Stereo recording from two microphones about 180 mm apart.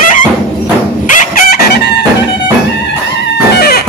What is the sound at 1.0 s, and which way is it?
Chicken, 50° left (ahead or behind).